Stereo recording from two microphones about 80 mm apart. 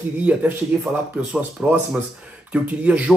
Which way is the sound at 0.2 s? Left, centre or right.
Centre.